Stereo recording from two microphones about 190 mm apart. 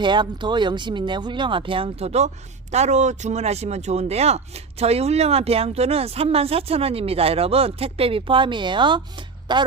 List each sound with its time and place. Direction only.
0.0 s speech: 25° right (ahead or behind)